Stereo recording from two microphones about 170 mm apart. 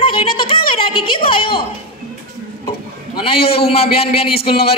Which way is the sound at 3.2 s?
35° left (ahead or behind).